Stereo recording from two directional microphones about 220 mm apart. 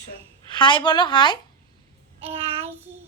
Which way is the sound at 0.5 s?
20° left (ahead or behind).